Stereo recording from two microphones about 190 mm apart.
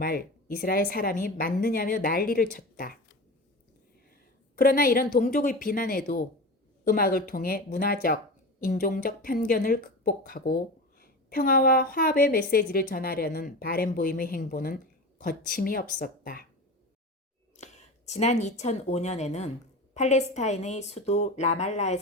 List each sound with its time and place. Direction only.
0.0 s a woman's voice: 50° left (ahead or behind)
4.5 s a woman's voice: 50° left (ahead or behind)
17.6 s speech: 40° left (ahead or behind)